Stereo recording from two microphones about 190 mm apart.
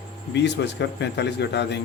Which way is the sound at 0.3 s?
65° left (ahead or behind).